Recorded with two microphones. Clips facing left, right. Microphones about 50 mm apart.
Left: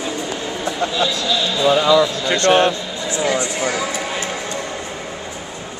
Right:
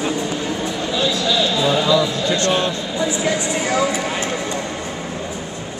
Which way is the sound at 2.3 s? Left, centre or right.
Left.